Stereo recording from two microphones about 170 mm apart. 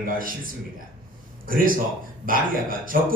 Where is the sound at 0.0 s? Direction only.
55° right (ahead or behind).